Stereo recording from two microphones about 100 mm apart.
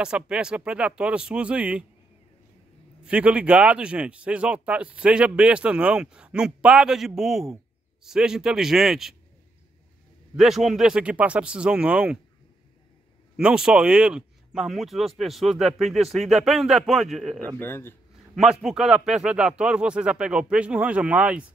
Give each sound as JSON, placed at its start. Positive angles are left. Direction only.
{"t": 0.0, "sound": "a man's voice", "side_deg": -10}
{"t": 3.0, "sound": "a man's voice", "side_deg": -10}
{"t": 10.3, "sound": "a man's voice", "side_deg": 0}
{"t": 13.4, "sound": "speech", "side_deg": -10}
{"t": 17.6, "sound": "speech", "side_deg": 20}
{"t": 18.3, "sound": "a man's voice", "side_deg": -5}